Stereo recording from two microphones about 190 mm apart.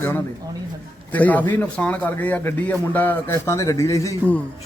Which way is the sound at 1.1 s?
10° left (ahead or behind).